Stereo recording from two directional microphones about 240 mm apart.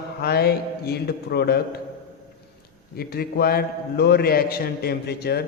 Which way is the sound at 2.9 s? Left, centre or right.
Left.